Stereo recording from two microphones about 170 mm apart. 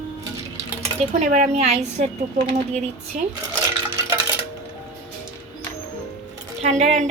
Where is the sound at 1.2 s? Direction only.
45° right (ahead or behind).